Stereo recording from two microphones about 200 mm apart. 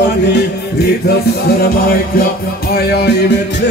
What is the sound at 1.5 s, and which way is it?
Music, 50° left (ahead or behind).